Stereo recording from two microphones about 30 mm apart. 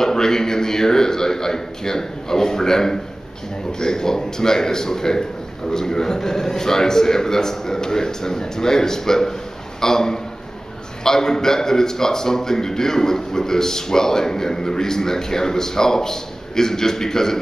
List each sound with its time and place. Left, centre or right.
0.0 s a man's voice: centre